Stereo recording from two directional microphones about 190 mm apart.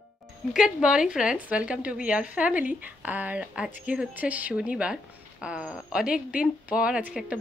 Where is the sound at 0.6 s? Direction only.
5° right (ahead or behind).